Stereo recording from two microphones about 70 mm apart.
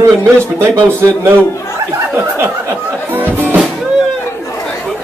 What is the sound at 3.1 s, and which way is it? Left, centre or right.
Music, right.